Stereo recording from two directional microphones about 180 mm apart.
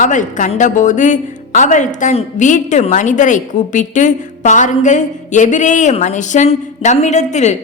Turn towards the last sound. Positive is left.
turn(degrees=40)  # may be behind; listen again after turning